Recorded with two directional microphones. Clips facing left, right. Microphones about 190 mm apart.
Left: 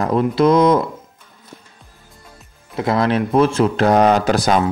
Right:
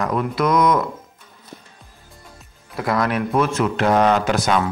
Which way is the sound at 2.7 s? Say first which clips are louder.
Left 4 dB; 25° left (ahead or behind).